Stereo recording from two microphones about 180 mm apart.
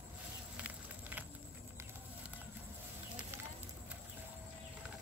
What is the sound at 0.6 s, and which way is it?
Walk, 10° right (ahead or behind).